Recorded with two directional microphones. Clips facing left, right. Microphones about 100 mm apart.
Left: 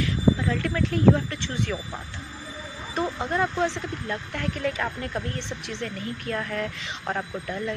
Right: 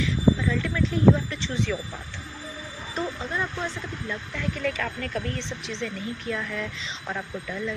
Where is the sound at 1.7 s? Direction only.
20° left (ahead or behind).